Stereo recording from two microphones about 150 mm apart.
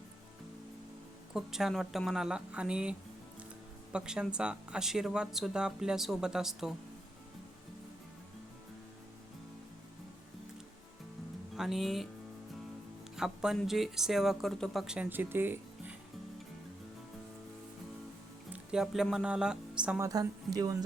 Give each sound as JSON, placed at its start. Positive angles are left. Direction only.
{"t": 1.3, "sound": "speech", "side_deg": -5}
{"t": 3.9, "sound": "speech", "side_deg": -5}
{"t": 11.5, "sound": "speech", "side_deg": 0}
{"t": 13.1, "sound": "speech", "side_deg": -5}
{"t": 18.5, "sound": "speech", "side_deg": -5}
{"t": 20.0, "sound": "speech", "side_deg": -25}